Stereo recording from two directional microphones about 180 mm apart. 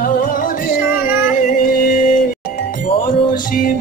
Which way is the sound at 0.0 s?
50° left (ahead or behind).